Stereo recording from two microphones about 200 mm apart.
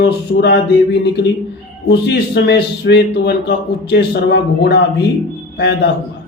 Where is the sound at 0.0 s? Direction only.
55° left (ahead or behind).